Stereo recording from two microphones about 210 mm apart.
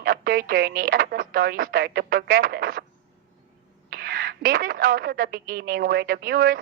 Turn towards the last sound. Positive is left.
turn(degrees=-45)  # may be behind; listen again after turning